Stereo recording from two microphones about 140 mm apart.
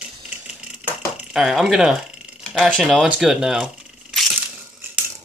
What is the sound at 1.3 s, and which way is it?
Speech, centre (ahead or behind).